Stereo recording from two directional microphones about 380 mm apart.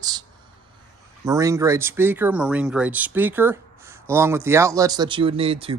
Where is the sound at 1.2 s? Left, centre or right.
Centre.